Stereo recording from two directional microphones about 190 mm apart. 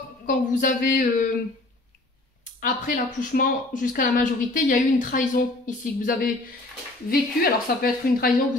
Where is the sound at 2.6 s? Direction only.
45° left (ahead or behind).